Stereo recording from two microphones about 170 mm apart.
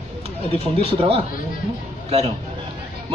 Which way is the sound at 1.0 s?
35° right (ahead or behind).